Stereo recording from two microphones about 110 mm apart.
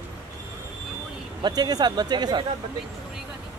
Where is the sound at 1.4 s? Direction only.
40° right (ahead or behind).